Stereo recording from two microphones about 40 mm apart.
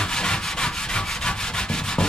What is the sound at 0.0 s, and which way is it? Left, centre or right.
Rub, centre.